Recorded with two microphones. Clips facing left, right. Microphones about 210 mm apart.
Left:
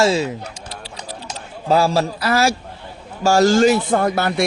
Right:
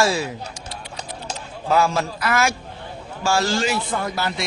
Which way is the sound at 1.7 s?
35° left (ahead or behind).